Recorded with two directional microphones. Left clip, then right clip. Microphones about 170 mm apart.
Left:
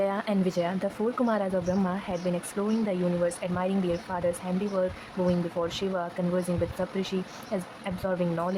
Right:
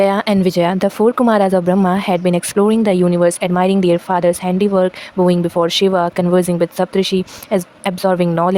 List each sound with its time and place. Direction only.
0.0 s speech: 65° right (ahead or behind)